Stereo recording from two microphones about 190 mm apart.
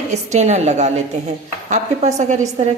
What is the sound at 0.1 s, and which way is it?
A woman's voice, 35° right (ahead or behind).